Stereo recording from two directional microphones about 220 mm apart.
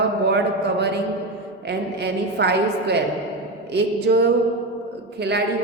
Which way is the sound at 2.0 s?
50° right (ahead or behind).